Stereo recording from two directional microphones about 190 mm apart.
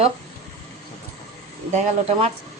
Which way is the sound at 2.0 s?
30° right (ahead or behind).